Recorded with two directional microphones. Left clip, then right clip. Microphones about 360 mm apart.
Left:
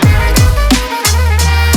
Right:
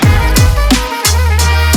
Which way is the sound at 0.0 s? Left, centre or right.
Centre.